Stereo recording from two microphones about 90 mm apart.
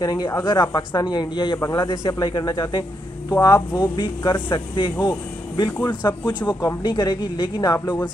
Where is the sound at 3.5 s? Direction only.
30° left (ahead or behind).